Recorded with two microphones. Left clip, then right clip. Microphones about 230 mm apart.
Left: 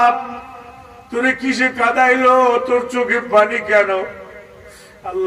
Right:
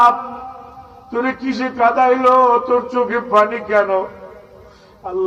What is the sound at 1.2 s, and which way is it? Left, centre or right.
A man's voice, left.